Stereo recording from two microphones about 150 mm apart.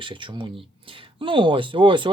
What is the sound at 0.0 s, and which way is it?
Speech, 35° right (ahead or behind).